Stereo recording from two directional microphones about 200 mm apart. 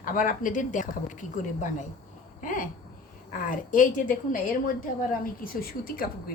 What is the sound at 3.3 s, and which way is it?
A woman's voice, 40° left (ahead or behind).